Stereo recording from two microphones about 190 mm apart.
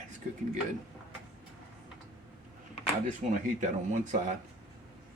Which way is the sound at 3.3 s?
40° right (ahead or behind).